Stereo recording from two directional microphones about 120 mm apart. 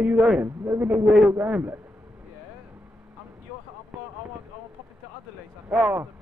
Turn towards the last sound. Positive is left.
turn(degrees=-10)  # may be behind; listen again after turning